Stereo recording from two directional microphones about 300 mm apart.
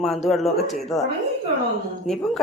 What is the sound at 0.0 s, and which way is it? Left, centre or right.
Speech, centre.